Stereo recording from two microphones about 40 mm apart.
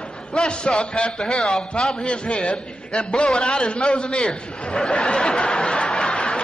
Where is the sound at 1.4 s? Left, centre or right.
Centre.